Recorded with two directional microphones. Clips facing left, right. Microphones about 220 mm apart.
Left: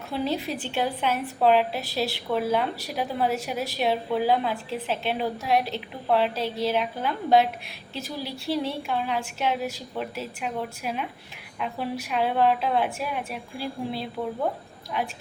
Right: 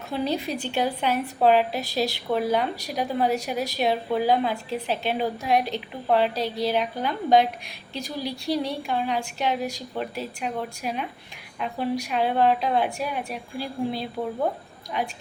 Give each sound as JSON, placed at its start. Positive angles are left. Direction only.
{"t": 0.1, "sound": "a woman's voice", "side_deg": 0}
{"t": 6.3, "sound": "a woman's voice", "side_deg": -35}
{"t": 6.7, "sound": "a woman's voice", "side_deg": 0}